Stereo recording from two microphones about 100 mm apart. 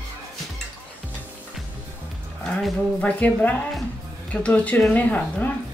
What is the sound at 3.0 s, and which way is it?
Speech, 15° left (ahead or behind).